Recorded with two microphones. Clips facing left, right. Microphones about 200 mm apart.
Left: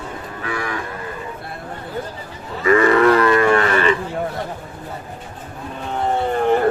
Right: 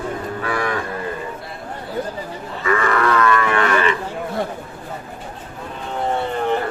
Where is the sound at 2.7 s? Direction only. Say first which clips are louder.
Left 6 dB; 30° left (ahead or behind).